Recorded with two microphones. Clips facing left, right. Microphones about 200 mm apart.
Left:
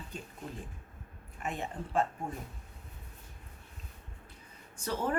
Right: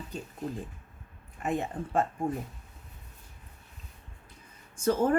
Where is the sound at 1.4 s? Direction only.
45° right (ahead or behind).